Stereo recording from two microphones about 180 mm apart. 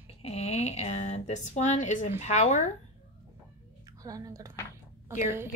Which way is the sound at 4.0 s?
20° right (ahead or behind).